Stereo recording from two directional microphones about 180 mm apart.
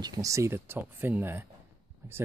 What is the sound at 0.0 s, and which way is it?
Speech, 20° right (ahead or behind).